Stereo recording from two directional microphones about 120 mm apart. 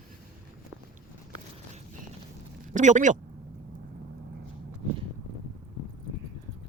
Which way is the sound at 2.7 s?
90° right.